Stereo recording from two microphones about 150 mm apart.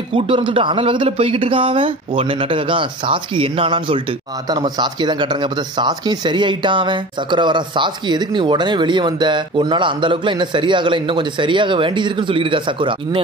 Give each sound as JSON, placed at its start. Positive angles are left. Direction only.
{"t": 0.1, "sound": "speech", "side_deg": -35}